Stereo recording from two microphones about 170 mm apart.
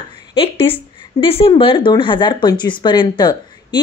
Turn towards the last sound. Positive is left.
turn(degrees=25)  # may be behind; listen again after turning